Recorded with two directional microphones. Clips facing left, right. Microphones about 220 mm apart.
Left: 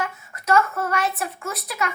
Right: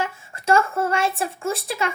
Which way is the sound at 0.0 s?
30° right (ahead or behind).